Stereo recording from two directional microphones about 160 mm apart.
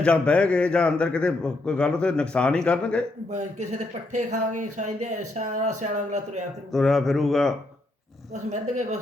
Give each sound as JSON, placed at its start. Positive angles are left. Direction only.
{"t": 0.0, "sound": "a man's voice", "side_deg": 5}
{"t": 3.2, "sound": "speech", "side_deg": -45}
{"t": 6.7, "sound": "a man's voice", "side_deg": 0}
{"t": 8.3, "sound": "speech", "side_deg": -45}